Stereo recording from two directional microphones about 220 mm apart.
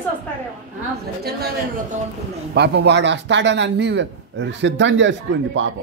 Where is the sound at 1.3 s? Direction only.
45° right (ahead or behind).